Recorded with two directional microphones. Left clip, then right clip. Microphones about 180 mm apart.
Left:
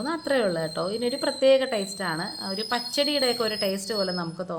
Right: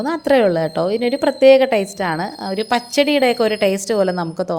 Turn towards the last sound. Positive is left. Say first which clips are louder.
# right 10 dB
turn(degrees=-40)  # may be behind; listen again after turning